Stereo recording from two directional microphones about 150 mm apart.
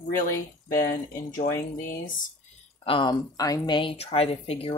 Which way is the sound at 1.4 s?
60° left (ahead or behind).